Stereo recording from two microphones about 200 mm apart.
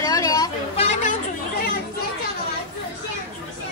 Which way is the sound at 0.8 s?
35° left (ahead or behind).